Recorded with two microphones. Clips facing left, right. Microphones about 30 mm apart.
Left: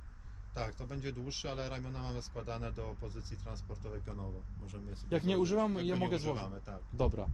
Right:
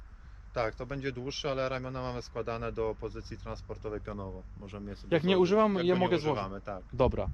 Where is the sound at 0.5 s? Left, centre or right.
Right.